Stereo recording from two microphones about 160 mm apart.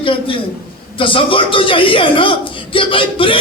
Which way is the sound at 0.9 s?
35° left (ahead or behind).